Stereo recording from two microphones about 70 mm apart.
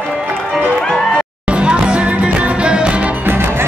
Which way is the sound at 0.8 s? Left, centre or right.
Centre.